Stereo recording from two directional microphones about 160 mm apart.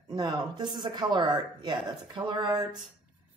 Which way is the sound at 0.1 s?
25° right (ahead or behind).